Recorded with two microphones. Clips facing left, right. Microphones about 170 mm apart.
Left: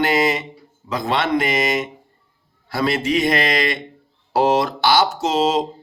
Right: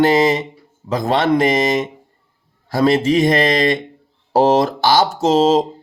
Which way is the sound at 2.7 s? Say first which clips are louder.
Right 6 dB; 40° right (ahead or behind).